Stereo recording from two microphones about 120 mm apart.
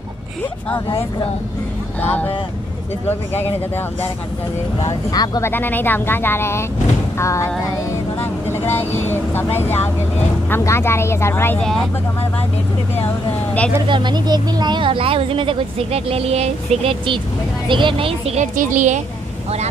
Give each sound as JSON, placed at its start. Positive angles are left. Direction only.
{"t": 2.0, "sound": "speech", "side_deg": 15}
{"t": 4.8, "sound": "speech", "side_deg": 35}
{"t": 5.4, "sound": "speech", "side_deg": 15}
{"t": 8.2, "sound": "vehicle", "side_deg": 20}
{"t": 10.5, "sound": "speech", "side_deg": 20}
{"t": 13.8, "sound": "speech", "side_deg": -40}